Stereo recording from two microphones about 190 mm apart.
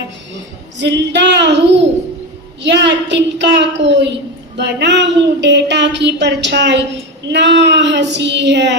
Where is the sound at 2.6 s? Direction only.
70° right (ahead or behind).